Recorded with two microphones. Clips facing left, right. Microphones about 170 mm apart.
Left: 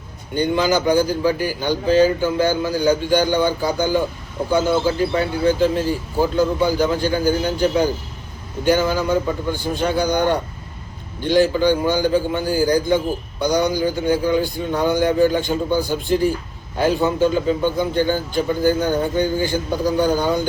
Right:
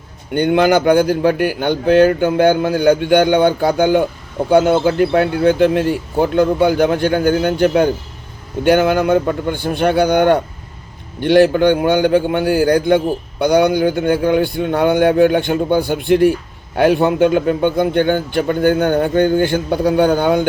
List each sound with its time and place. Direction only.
0.3 s a man's voice: 60° right (ahead or behind)